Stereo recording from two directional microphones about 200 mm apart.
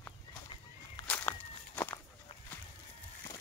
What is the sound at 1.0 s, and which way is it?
Walk, 5° left (ahead or behind).